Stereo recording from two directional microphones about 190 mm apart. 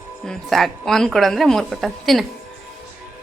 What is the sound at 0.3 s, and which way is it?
A woman's voice, centre (ahead or behind).